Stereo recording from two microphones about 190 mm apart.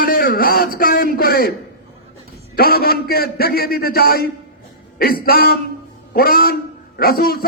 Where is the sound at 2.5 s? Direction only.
50° left (ahead or behind).